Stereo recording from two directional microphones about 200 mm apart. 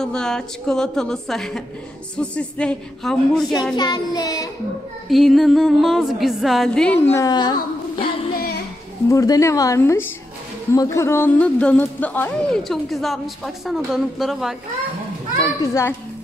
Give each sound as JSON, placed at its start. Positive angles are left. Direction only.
{"t": 0.0, "sound": "music", "side_deg": 5}
{"t": 3.7, "sound": "child singing", "side_deg": 20}
{"t": 5.1, "sound": "music", "side_deg": 0}
{"t": 7.9, "sound": "singing", "side_deg": 25}
{"t": 9.1, "sound": "speech", "side_deg": 15}
{"t": 13.7, "sound": "music", "side_deg": 0}
{"t": 15.6, "sound": "speech", "side_deg": 15}